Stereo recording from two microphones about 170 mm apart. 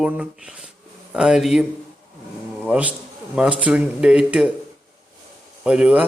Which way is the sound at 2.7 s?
10° right (ahead or behind).